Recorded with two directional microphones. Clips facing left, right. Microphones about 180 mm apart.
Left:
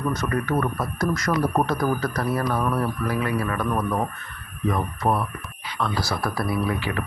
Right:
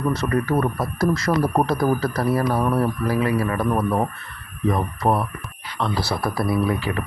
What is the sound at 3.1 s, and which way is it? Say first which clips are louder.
Speech: right 4 dB; 35° right (ahead or behind).